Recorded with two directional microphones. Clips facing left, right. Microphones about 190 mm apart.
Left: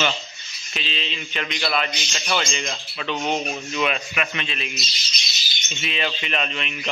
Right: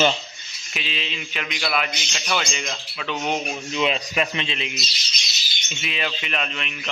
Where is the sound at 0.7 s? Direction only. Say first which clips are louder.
Even; 10° right (ahead or behind); by 3.4 s 10° left (ahead or behind).